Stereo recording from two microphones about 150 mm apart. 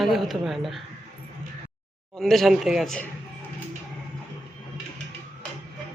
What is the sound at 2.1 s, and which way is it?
Speech, centre (ahead or behind).